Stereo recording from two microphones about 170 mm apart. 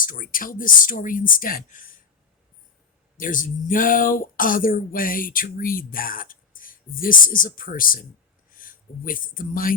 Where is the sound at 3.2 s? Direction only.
50° left (ahead or behind).